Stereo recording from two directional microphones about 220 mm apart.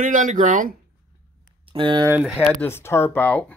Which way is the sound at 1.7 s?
20° right (ahead or behind).